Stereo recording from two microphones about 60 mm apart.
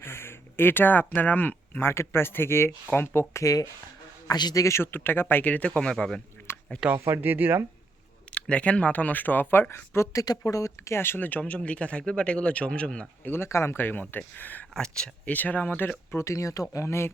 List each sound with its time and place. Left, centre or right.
0.0 s speech: left
3.4 s a man's voice: left
4.7 s speech: left; by 6.2 s centre
6.9 s speech: right
8.3 s speech: centre; by 10.9 s left
10.9 s speech: left; by 13.1 s centre
13.2 s speech: left
13.7 s speech: left
14.7 s speech: centre
15.2 s speech: left
16.1 s speech: left